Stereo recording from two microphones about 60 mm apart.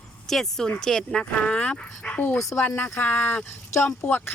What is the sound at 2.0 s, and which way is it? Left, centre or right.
Speech, centre.